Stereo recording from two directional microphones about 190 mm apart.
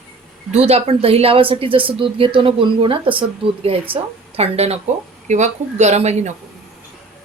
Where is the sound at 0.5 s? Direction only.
35° right (ahead or behind).